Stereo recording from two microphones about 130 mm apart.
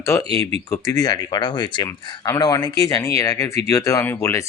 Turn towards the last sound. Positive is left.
turn(degrees=20)  # may be behind; listen again after turning